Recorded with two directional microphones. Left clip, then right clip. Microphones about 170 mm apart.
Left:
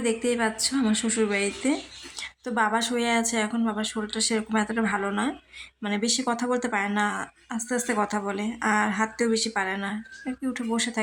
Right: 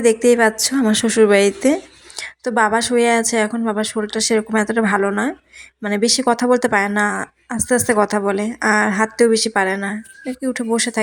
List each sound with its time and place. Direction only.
0.0 s a woman's voice: 35° right (ahead or behind)